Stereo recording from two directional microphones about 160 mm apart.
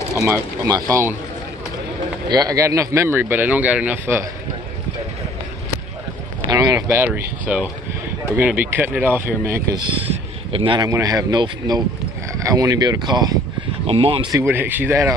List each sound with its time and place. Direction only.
0.2 s speech: 20° right (ahead or behind)
2.2 s speech: 25° right (ahead or behind)
6.5 s speech: 20° right (ahead or behind)
9.8 s a man's voice: 35° right (ahead or behind)
10.9 s speech: 20° right (ahead or behind)
13.8 s speech: 35° right (ahead or behind)
14.3 s speech: 15° right (ahead or behind)